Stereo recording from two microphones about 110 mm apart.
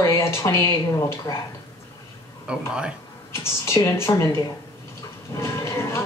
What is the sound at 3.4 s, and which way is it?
Speech, 25° left (ahead or behind).